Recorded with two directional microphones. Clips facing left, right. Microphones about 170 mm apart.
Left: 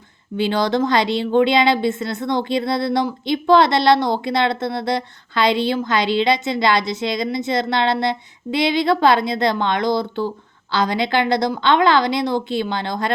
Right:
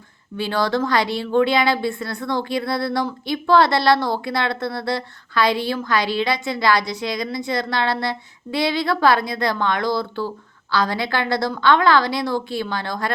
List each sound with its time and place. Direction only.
0.3 s speech: 20° left (ahead or behind)